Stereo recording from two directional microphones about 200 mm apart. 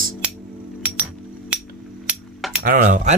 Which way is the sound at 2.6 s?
45° right (ahead or behind).